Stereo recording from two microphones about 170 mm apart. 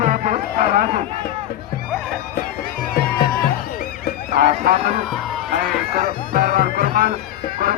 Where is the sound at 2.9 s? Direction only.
60° left (ahead or behind).